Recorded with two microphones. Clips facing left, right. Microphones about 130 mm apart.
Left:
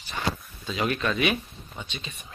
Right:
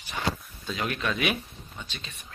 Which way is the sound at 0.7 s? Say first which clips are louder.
Left 3 dB; 5° left (ahead or behind).